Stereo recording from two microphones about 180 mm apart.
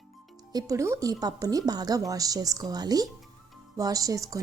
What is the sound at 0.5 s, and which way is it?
Speech, 20° right (ahead or behind).